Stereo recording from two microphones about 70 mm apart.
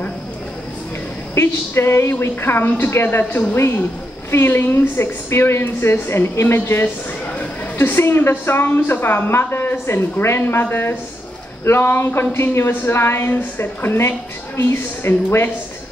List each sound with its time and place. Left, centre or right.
1.3 s a woman's voice: left